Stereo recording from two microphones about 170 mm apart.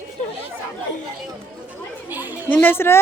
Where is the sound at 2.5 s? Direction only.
10° left (ahead or behind).